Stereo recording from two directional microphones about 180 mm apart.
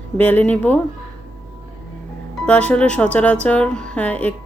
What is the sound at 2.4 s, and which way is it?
Speech, 5° left (ahead or behind).